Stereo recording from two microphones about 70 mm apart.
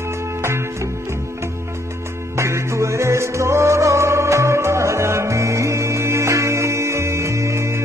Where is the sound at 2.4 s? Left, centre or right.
Right.